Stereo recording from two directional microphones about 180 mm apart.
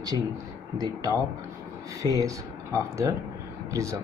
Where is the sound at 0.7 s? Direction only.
20° right (ahead or behind).